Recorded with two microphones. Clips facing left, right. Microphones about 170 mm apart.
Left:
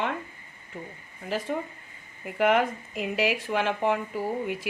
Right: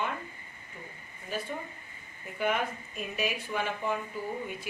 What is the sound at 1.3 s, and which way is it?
Speech, 90° left.